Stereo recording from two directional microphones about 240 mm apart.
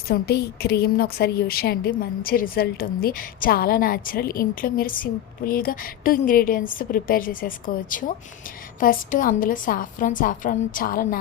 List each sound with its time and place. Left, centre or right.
0.1 s a woman's voice: left